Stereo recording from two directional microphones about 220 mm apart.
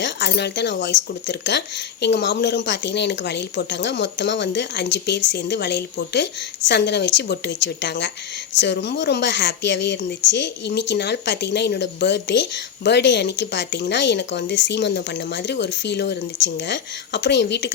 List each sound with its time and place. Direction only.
0.0 s a woman's voice: 50° left (ahead or behind)